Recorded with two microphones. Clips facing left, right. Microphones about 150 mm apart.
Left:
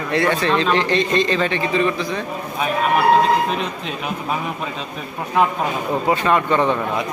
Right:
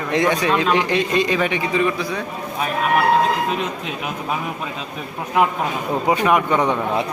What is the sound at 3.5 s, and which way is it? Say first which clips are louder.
A man's voice: even; 5° right (ahead or behind).